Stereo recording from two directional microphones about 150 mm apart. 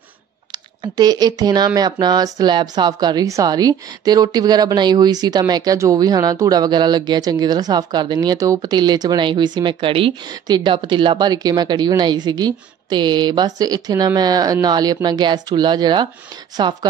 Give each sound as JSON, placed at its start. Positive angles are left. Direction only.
{"t": 0.5, "sound": "speech", "side_deg": -25}